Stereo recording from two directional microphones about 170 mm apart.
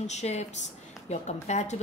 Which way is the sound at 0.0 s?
40° left (ahead or behind).